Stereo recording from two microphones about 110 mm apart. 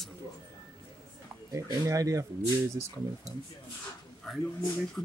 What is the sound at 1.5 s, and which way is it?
Speech, 30° right (ahead or behind).